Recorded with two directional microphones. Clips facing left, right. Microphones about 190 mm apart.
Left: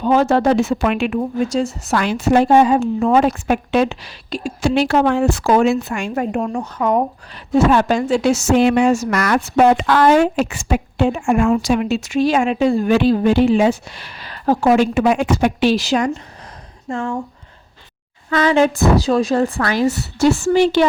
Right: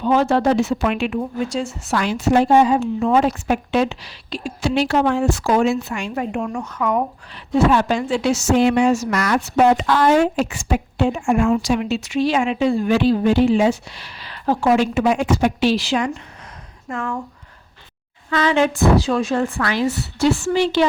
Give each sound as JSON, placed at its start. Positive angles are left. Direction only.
{"t": 0.0, "sound": "a woman's voice", "side_deg": 45}
{"t": 2.0, "sound": "a woman's voice", "side_deg": 55}
{"t": 7.7, "sound": "a woman's voice", "side_deg": 45}
{"t": 15.7, "sound": "a woman's voice", "side_deg": 40}
{"t": 16.9, "sound": "speech", "side_deg": 25}
{"t": 18.3, "sound": "a woman's voice", "side_deg": 40}